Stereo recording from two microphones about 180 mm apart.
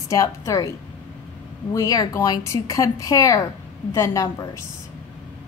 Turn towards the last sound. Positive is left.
turn(degrees=20)  # may be behind; listen again after turning